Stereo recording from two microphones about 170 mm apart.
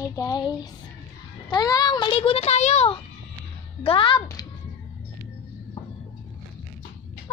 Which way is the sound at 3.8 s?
30° left (ahead or behind).